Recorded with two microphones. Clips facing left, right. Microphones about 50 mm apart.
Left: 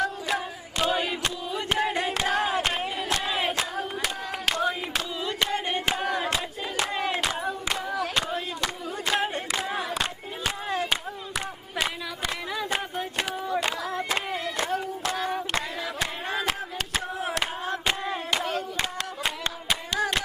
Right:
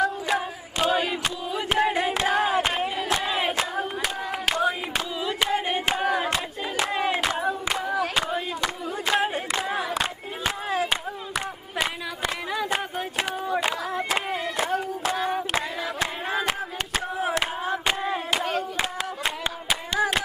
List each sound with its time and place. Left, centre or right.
0.0 s chant: centre
8.1 s clapping: centre
10.7 s a sound: centre
14.3 s hands: centre
20.0 s hands: centre